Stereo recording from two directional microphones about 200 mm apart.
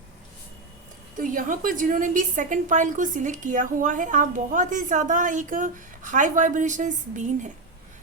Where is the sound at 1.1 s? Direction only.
40° right (ahead or behind).